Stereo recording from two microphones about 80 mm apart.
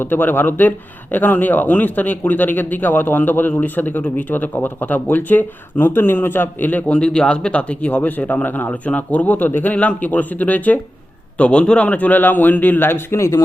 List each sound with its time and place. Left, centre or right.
0.0 s a man's voice: left